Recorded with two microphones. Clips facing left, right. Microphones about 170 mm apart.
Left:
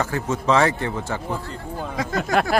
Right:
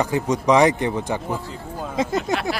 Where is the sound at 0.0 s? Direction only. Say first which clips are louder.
Right 3 dB; 15° right (ahead or behind).